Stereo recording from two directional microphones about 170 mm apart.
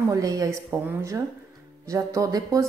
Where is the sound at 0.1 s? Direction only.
20° right (ahead or behind).